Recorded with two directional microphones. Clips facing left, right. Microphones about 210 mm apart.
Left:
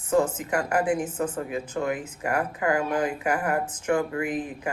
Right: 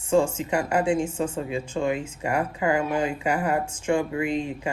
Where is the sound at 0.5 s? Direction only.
25° right (ahead or behind).